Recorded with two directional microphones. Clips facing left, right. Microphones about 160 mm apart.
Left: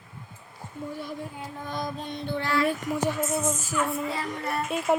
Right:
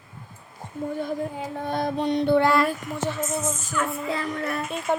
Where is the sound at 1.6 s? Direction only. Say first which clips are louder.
Right 8 dB; 65° right (ahead or behind).